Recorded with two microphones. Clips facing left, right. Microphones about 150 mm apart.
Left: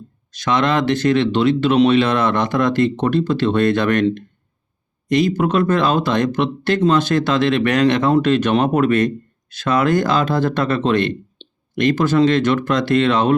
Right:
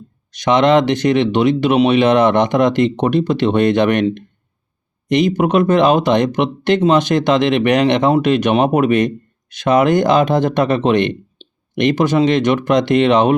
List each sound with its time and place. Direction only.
0.3 s speech: 20° right (ahead or behind)